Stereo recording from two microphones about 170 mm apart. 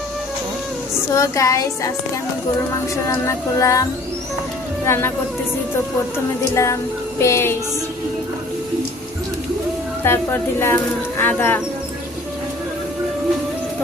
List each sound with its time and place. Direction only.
1.1 s child singing: 20° left (ahead or behind)
2.9 s music: 15° left (ahead or behind)
4.9 s music: 15° left (ahead or behind)
6.5 s music: 15° left (ahead or behind)
10.0 s music: 15° left (ahead or behind)